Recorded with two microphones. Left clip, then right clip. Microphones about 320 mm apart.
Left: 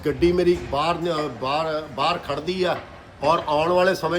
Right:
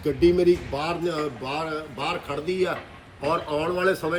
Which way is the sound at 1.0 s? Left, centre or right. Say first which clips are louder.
Left 3 dB; centre.